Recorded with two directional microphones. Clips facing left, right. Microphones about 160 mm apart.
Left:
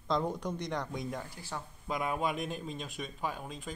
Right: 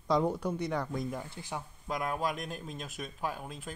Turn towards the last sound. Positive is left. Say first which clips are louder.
# even
turn(degrees=-5)  # may be behind; listen again after turning